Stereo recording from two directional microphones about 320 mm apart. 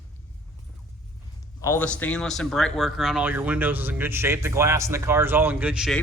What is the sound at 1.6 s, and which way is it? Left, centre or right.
Speech, centre.